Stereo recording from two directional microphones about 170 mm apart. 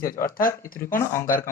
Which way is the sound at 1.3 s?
50° left (ahead or behind).